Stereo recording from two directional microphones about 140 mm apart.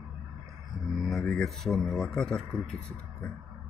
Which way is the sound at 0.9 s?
Centre (ahead or behind).